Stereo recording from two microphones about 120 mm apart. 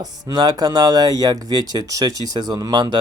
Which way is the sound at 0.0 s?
35° right (ahead or behind).